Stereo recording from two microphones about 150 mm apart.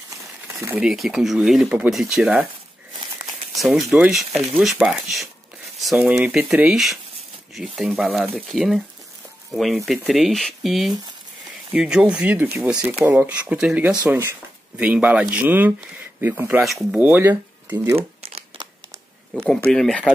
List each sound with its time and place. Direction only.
0.7 s speech: centre (ahead or behind)
3.5 s speech: centre (ahead or behind)
16.6 s speech: centre (ahead or behind)
17.9 s crumpling: 40° right (ahead or behind)
19.3 s speech: 5° left (ahead or behind)